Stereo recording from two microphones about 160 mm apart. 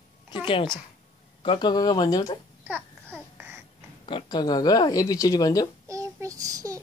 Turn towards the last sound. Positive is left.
turn(degrees=-20)  # may be behind; listen again after turning